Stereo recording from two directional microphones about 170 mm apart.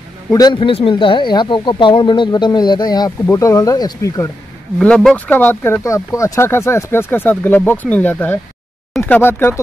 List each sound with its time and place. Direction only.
0.3 s speech: 25° left (ahead or behind)
4.7 s speech: 5° left (ahead or behind)